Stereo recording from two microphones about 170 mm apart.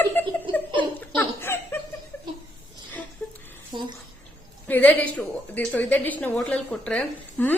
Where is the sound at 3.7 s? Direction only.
25° right (ahead or behind).